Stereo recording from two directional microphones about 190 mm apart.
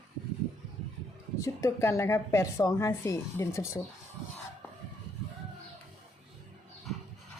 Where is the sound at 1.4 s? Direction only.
15° left (ahead or behind).